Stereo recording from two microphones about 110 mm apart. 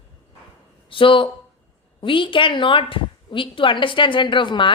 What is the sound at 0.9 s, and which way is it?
Speech, 50° left (ahead or behind).